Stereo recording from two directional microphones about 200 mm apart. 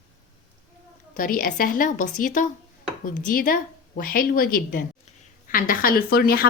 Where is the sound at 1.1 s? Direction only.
45° left (ahead or behind).